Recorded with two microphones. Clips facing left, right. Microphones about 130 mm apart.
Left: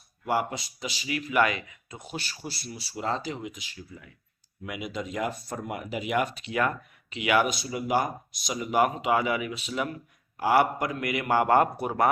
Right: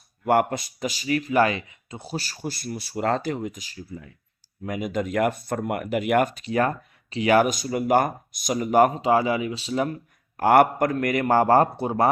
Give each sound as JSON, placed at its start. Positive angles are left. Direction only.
{"t": 0.3, "sound": "speech", "side_deg": -55}
{"t": 10.3, "sound": "speech", "side_deg": -55}